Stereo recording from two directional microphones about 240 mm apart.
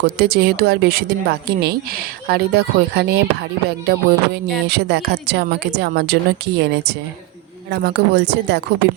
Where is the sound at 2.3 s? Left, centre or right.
Right.